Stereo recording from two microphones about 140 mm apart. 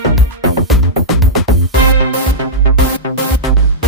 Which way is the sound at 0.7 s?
Centre (ahead or behind).